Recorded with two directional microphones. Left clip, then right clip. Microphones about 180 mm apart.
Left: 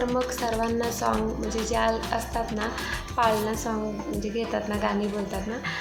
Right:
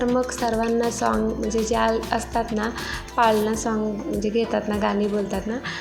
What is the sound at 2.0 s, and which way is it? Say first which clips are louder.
Speech: right 4 dB; 25° right (ahead or behind).